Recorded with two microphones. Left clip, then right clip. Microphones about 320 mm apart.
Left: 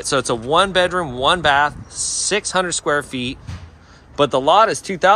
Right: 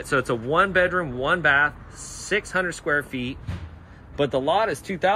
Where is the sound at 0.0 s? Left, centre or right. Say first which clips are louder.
Left 4 dB; centre.